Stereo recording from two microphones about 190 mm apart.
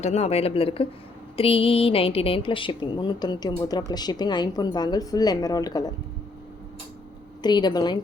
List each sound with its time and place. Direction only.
0.0 s a woman's voice: 35° left (ahead or behind); by 5.9 s 20° left (ahead or behind)
7.4 s a woman's voice: 20° left (ahead or behind)